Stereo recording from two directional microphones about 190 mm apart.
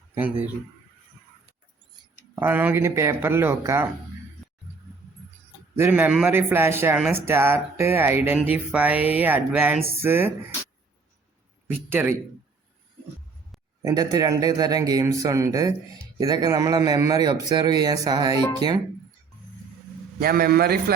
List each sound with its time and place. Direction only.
0.1 s speech: 10° right (ahead or behind)
2.3 s a man's voice: 10° right (ahead or behind)
5.7 s a man's voice: 10° right (ahead or behind)
11.9 s a man's voice: 10° right (ahead or behind)
13.8 s a man's voice: 20° right (ahead or behind)
20.1 s a man's voice: 50° right (ahead or behind)